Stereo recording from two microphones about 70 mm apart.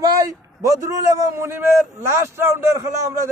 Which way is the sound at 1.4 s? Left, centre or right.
Right.